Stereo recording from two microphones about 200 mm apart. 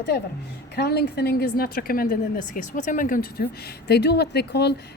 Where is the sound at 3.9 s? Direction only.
55° left (ahead or behind).